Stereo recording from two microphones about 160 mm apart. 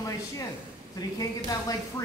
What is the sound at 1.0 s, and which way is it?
Speech, 25° left (ahead or behind).